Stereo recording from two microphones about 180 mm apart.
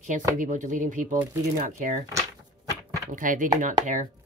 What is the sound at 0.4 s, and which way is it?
Speech, 45° right (ahead or behind).